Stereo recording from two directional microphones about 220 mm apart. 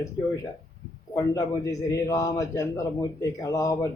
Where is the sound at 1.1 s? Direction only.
15° left (ahead or behind).